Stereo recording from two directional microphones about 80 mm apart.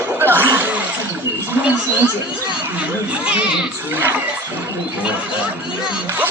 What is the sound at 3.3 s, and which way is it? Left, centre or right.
Children playing, centre.